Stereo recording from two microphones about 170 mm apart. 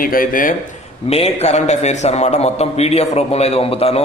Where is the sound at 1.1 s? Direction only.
40° left (ahead or behind).